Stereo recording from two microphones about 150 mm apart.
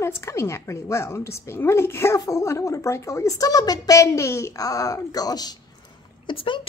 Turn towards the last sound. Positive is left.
turn(degrees=35)  # may be behind; listen again after turning